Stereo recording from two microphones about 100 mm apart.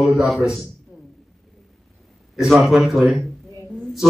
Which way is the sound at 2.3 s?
5° right (ahead or behind).